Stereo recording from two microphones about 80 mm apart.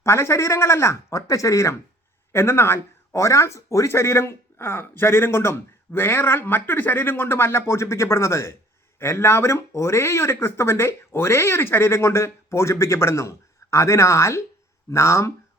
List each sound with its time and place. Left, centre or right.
0.0 s speech: left